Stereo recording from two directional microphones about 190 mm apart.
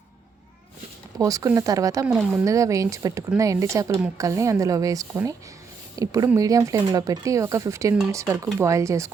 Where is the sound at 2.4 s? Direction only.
15° right (ahead or behind).